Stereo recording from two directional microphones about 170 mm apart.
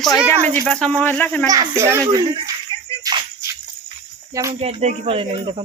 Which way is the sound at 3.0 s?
20° right (ahead or behind).